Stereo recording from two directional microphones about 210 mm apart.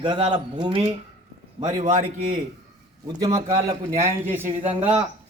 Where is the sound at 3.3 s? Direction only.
30° right (ahead or behind).